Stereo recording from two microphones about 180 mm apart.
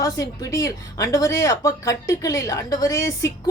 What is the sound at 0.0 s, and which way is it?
A woman's voice, 20° left (ahead or behind).